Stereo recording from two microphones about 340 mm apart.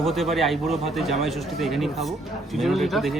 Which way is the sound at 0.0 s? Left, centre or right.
Centre.